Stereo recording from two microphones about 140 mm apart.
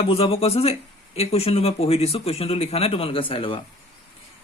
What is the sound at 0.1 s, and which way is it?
Speech, 45° left (ahead or behind).